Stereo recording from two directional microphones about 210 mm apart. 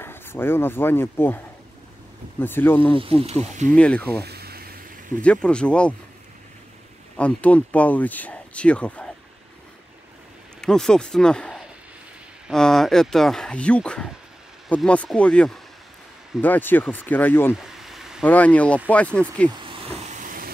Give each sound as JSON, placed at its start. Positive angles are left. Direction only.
{"t": 0.0, "sound": "speech", "side_deg": 10}
{"t": 3.0, "sound": "speech", "side_deg": -25}
{"t": 3.7, "sound": "speech", "side_deg": 5}
{"t": 4.2, "sound": "a sound", "side_deg": -50}
{"t": 5.2, "sound": "speech", "side_deg": 5}
{"t": 7.2, "sound": "speech", "side_deg": 5}
{"t": 10.6, "sound": "speech", "side_deg": 5}
{"t": 17.6, "sound": "a sound", "side_deg": 0}
{"t": 18.2, "sound": "speech", "side_deg": 5}
{"t": 19.7, "sound": "hiss", "side_deg": -35}